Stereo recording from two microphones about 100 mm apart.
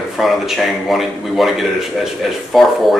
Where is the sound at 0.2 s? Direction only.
Centre (ahead or behind).